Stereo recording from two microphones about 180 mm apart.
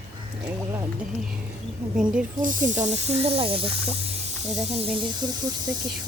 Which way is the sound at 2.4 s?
45° right (ahead or behind).